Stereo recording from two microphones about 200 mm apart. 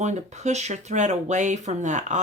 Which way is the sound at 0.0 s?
35° right (ahead or behind).